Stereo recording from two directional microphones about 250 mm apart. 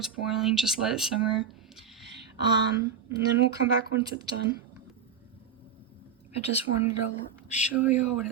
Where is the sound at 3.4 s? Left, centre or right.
Right.